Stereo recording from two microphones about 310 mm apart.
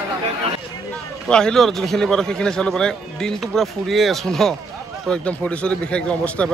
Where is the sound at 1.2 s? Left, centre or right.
Centre.